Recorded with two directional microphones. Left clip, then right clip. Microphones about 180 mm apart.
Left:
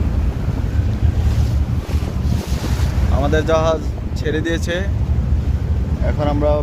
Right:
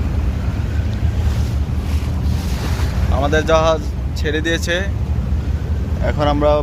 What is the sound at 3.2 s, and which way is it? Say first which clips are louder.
Speech: right 2 dB; centre (ahead or behind).